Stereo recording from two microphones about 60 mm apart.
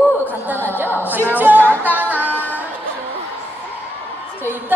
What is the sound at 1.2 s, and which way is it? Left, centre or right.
Music, right.